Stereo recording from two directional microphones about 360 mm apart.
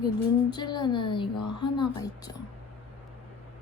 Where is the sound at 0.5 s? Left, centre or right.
Centre.